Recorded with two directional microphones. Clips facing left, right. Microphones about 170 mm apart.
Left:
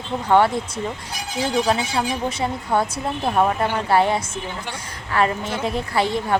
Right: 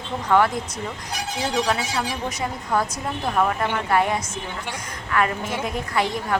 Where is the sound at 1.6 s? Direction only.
30° left (ahead or behind).